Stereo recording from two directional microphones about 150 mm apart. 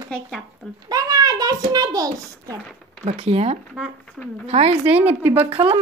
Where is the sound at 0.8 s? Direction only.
25° right (ahead or behind).